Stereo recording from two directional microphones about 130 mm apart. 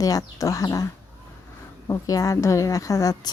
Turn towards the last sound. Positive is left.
turn(degrees=25)  # may be behind; listen again after turning